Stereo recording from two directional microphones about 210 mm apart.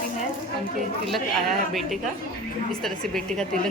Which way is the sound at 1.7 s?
Centre (ahead or behind).